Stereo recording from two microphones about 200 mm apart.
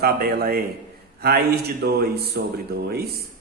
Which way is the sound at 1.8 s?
55° right (ahead or behind).